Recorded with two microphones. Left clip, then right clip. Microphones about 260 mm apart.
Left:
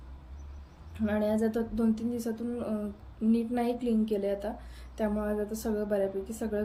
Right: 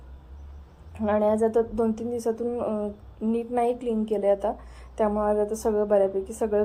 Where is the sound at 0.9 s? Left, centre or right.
Centre.